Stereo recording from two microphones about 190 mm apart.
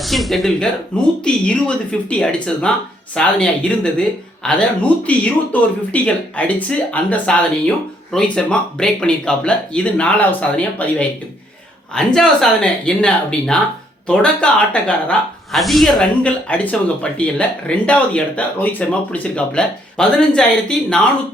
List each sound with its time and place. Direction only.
0.0 s speech: centre (ahead or behind)